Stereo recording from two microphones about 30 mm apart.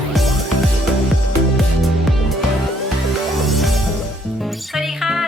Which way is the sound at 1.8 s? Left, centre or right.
Centre.